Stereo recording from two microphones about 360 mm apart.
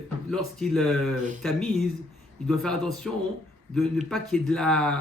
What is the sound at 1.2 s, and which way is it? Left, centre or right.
Speech, right.